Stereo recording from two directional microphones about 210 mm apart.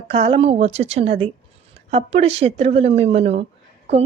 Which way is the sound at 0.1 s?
25° right (ahead or behind).